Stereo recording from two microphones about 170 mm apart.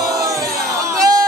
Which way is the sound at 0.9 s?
20° right (ahead or behind).